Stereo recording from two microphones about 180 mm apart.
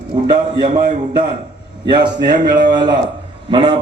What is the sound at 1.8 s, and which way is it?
A man's voice, 25° right (ahead or behind).